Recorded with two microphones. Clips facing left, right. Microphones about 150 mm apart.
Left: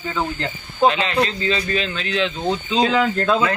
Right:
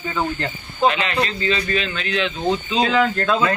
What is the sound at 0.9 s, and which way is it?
Speech, 30° left (ahead or behind).